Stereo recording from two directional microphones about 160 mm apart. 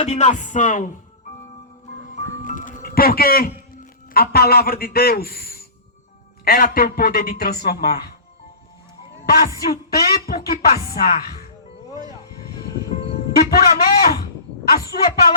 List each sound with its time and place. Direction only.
0.0 s music: 45° left (ahead or behind)
2.1 s music: 55° left (ahead or behind)
4.1 s a man's voice: 70° left (ahead or behind)
9.2 s a man's voice: 70° left (ahead or behind)
13.3 s a man's voice: 70° left (ahead or behind)